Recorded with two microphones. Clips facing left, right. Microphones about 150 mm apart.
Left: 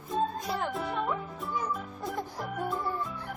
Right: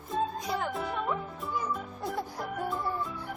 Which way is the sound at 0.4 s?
Centre (ahead or behind).